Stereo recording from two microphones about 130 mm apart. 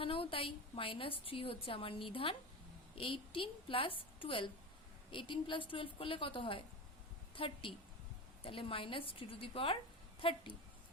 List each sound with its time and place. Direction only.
0.0 s a woman's voice: 45° left (ahead or behind)